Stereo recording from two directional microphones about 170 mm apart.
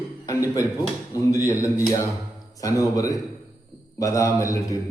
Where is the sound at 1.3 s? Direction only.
20° left (ahead or behind).